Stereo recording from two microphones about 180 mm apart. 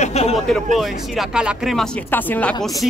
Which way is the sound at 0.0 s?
35° left (ahead or behind).